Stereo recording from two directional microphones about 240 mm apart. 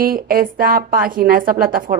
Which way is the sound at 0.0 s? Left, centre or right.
Right.